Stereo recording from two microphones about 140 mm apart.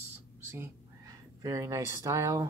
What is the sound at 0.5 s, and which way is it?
Speech, 20° right (ahead or behind).